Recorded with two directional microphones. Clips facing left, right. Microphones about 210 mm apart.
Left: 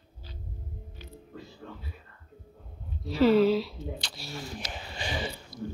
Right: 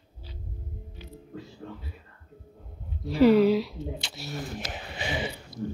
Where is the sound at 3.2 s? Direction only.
15° right (ahead or behind).